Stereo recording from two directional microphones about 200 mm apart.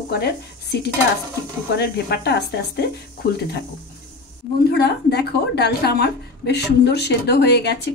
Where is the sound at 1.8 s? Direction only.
55° left (ahead or behind).